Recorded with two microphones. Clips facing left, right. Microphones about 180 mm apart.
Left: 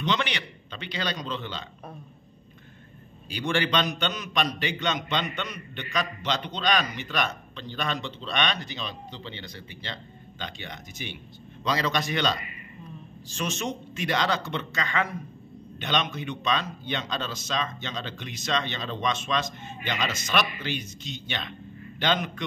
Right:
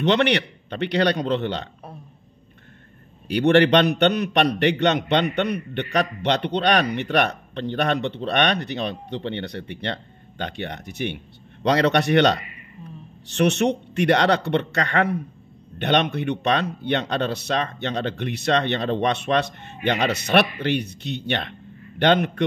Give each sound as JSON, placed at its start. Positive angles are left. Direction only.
{"t": 0.0, "sound": "a man's voice", "side_deg": -65}
{"t": 3.3, "sound": "a man's voice", "side_deg": -65}